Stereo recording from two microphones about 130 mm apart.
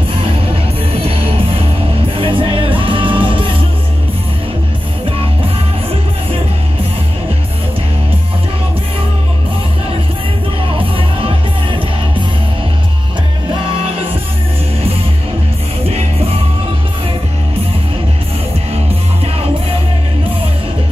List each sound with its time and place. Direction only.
0.9 s music: 45° right (ahead or behind)
11.0 s music: 45° right (ahead or behind)
15.9 s music: 50° right (ahead or behind)